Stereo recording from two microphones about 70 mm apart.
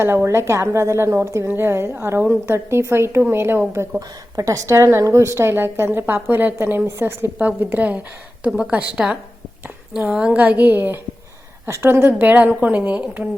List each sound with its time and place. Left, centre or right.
0.0 s a woman's voice: right
4.4 s a woman's voice: right
7.3 s a woman's voice: centre
10.1 s a woman's voice: centre
10.3 s a woman's voice: right